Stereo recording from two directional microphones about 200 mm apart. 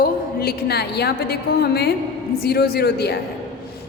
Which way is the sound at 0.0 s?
50° left (ahead or behind).